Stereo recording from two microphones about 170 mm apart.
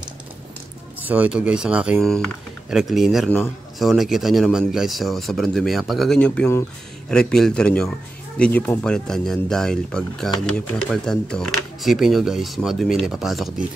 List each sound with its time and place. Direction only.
0.9 s speech: 10° right (ahead or behind)